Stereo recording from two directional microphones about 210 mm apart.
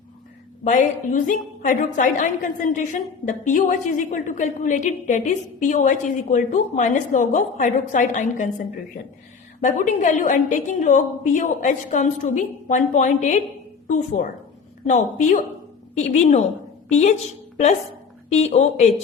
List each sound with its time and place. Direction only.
0.7 s a woman's voice: 40° left (ahead or behind)
18.3 s a woman's voice: 30° left (ahead or behind)